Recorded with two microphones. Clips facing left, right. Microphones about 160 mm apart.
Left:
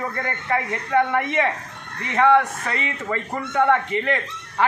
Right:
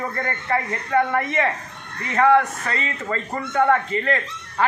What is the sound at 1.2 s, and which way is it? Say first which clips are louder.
Speech: left 1 dB; 15° left (ahead or behind).